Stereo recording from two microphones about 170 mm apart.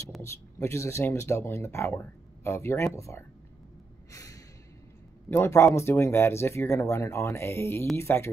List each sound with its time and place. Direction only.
0.2 s speech: 15° left (ahead or behind)
4.1 s snort: 20° left (ahead or behind)
5.3 s speech: 15° left (ahead or behind)